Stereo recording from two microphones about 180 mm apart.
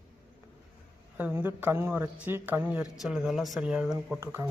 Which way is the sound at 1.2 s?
10° right (ahead or behind).